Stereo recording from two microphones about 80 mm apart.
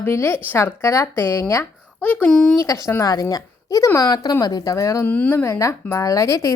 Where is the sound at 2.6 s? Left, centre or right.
Left.